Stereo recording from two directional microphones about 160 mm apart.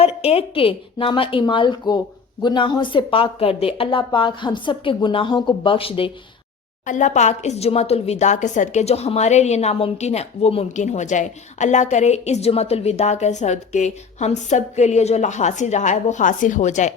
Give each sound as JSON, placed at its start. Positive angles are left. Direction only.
{"t": 0.2, "sound": "a woman's voice", "side_deg": 40}
{"t": 6.8, "sound": "speech", "side_deg": 50}